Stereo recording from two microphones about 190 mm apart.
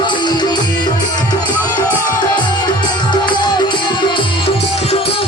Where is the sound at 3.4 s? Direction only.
25° left (ahead or behind).